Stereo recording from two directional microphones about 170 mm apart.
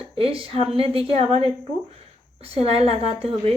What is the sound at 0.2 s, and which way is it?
A woman's voice, 35° right (ahead or behind).